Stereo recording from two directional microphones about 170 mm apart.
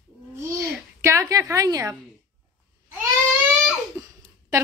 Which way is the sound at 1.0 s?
15° right (ahead or behind).